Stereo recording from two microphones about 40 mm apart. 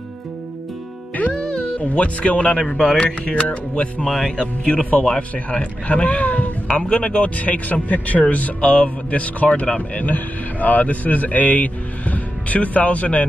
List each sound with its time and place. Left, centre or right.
1.2 s music: left
1.8 s speech: left
2.7 s speech: centre
4.0 s speech: centre
4.4 s speech: left
6.7 s speech: left
8.5 s speech: left
10.0 s a man's voice: left